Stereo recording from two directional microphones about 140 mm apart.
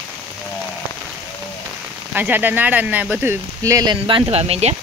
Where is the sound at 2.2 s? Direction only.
15° right (ahead or behind); by 4.8 s 50° right (ahead or behind).